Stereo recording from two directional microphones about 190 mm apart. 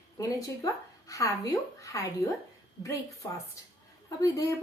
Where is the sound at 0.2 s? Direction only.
15° left (ahead or behind).